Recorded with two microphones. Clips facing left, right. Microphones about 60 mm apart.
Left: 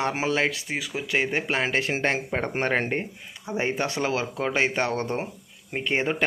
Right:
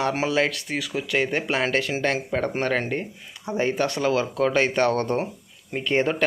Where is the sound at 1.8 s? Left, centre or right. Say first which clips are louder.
Right 1 dB; left.